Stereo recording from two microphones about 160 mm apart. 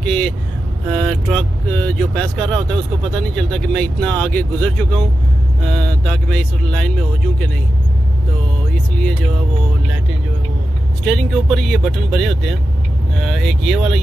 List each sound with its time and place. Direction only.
0.0 s vehicle: 5° left (ahead or behind)
0.8 s speech: centre (ahead or behind)
11.1 s speech: centre (ahead or behind)